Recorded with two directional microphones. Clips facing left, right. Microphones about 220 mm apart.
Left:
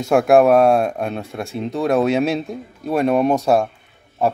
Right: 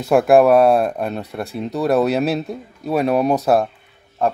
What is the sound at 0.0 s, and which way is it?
Speech, centre (ahead or behind).